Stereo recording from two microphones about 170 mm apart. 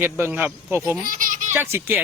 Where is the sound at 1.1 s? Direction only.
50° right (ahead or behind).